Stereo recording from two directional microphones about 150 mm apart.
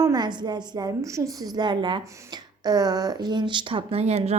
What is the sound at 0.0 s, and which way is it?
A woman's voice, 25° right (ahead or behind).